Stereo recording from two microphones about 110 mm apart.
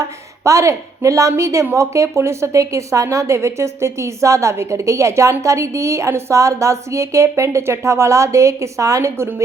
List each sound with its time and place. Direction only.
0.0 s a woman's voice: 30° right (ahead or behind)